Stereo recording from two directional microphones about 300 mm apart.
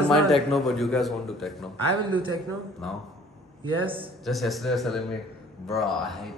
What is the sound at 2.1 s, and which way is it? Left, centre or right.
Speech, centre.